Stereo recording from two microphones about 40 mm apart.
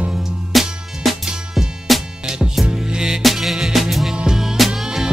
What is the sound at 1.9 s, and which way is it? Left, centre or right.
Music, centre.